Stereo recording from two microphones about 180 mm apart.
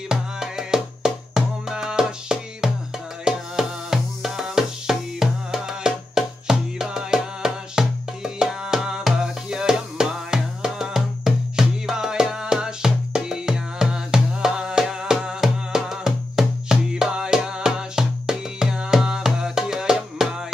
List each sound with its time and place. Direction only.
0.1 s music: 5° right (ahead or behind)